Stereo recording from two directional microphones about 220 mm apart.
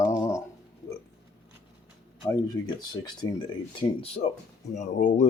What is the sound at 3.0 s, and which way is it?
Speech, 20° left (ahead or behind).